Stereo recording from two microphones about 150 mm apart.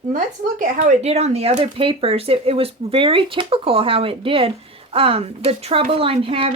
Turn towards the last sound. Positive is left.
turn(degrees=-35)  # may be behind; listen again after turning